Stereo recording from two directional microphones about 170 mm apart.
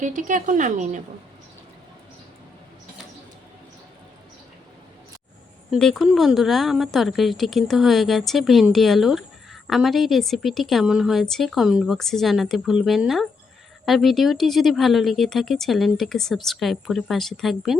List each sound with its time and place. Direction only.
0.0 s a woman's voice: 50° right (ahead or behind)
5.7 s speech: centre (ahead or behind)